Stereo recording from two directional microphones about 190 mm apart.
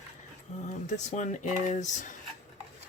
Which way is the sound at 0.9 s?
40° left (ahead or behind).